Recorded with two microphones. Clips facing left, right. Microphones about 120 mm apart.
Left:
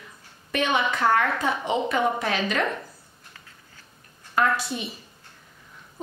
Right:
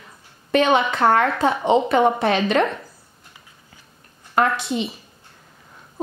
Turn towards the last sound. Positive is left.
turn(degrees=-25)  # may be behind; listen again after turning